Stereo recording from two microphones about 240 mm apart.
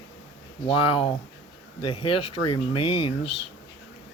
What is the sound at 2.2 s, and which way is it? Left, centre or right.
Speech, left.